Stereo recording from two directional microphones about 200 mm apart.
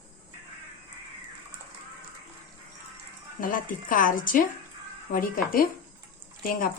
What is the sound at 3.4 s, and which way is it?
A woman's voice, 45° left (ahead or behind).